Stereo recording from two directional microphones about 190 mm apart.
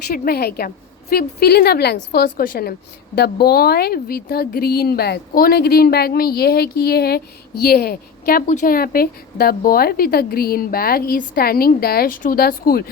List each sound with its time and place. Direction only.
0.1 s a woman's voice: 55° left (ahead or behind)